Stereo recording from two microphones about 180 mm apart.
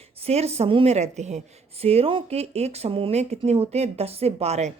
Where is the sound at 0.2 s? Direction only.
35° right (ahead or behind).